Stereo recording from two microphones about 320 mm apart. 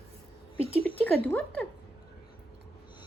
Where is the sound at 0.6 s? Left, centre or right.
Centre.